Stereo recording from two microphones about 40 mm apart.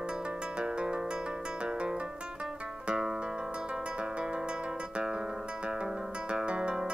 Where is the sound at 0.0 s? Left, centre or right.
Right.